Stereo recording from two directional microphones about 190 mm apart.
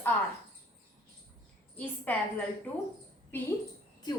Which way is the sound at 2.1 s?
10° left (ahead or behind).